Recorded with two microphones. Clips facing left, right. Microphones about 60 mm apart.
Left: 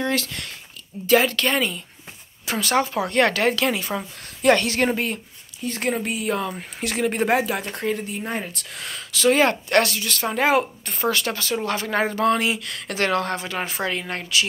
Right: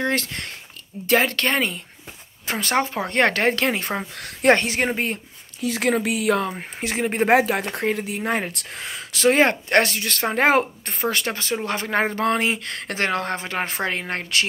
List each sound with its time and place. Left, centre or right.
0.0 s speech: right
4.6 s speech: right
5.6 s speech: right
6.5 s speech: right
7.2 s speech: right
8.3 s speech: right
9.1 s speech: right
10.9 s speech: right
13.0 s speech: right